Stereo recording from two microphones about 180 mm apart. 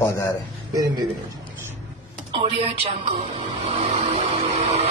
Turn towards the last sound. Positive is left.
turn(degrees=-35)  # may be behind; listen again after turning